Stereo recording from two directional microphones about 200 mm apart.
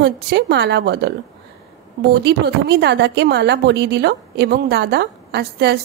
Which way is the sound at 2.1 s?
55° right (ahead or behind).